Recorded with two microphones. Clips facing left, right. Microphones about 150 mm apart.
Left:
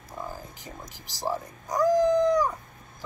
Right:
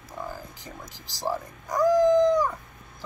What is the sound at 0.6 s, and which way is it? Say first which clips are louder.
A man's voice: even; 20° left (ahead or behind).